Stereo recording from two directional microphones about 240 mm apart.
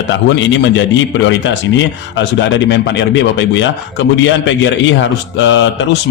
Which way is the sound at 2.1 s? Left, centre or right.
Left.